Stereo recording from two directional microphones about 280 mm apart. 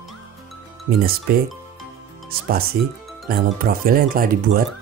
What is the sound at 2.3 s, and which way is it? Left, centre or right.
Speech, right.